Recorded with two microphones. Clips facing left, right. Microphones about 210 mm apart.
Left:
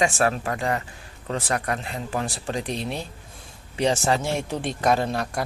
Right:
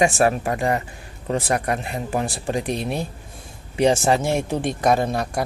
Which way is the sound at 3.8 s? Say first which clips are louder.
Right 4 dB; 15° right (ahead or behind).